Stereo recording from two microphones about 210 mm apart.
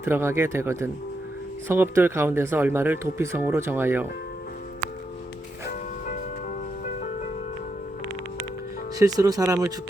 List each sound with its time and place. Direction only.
0.0 s speech: 10° right (ahead or behind)
9.0 s speech: 15° right (ahead or behind)